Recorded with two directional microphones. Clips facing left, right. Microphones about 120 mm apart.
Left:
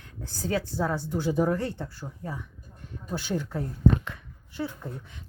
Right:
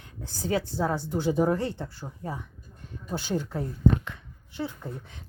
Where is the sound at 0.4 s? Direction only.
20° right (ahead or behind).